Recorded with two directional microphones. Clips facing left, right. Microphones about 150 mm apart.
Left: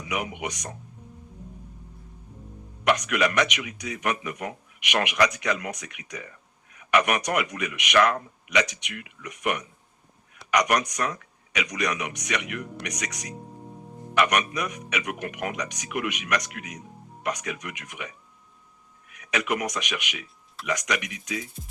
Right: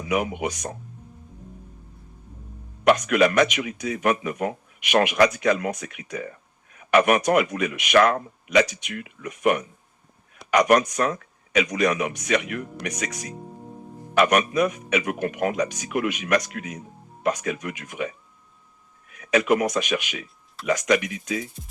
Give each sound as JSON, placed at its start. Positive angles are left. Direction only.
{"t": 0.1, "sound": "speech", "side_deg": -30}
{"t": 3.1, "sound": "speech", "side_deg": -30}
{"t": 6.7, "sound": "a sound", "side_deg": -30}
{"t": 7.3, "sound": "speech", "side_deg": -30}